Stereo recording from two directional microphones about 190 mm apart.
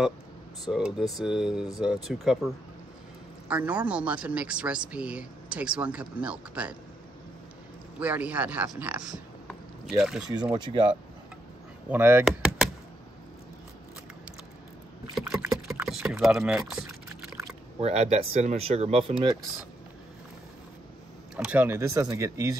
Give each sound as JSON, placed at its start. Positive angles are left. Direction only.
{"t": 0.7, "sound": "speech", "side_deg": 0}
{"t": 8.0, "sound": "speech", "side_deg": -10}
{"t": 10.3, "sound": "speech", "side_deg": -25}
{"t": 11.9, "sound": "speech", "side_deg": -10}
{"t": 15.1, "sound": "vehicle", "side_deg": 0}
{"t": 15.8, "sound": "typing", "side_deg": -5}
{"t": 17.7, "sound": "speech", "side_deg": -30}
{"t": 21.5, "sound": "speech", "side_deg": -10}